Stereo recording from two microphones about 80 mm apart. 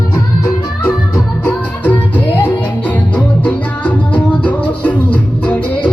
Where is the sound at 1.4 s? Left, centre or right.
Left.